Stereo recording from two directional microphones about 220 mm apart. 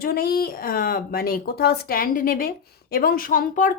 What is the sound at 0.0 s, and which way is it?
Speech, 45° left (ahead or behind).